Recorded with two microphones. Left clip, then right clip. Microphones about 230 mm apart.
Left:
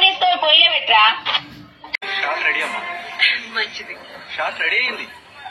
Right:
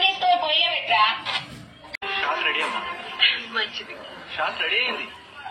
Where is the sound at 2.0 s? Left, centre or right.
Left.